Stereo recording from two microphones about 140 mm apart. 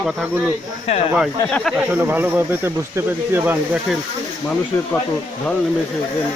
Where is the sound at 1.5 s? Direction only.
5° left (ahead or behind).